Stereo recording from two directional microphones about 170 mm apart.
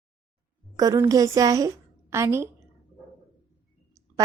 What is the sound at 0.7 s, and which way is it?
A woman's voice, 20° right (ahead or behind).